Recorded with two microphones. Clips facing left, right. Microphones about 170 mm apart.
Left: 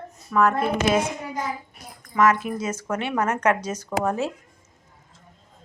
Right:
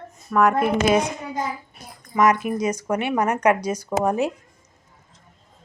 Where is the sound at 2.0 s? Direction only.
15° right (ahead or behind).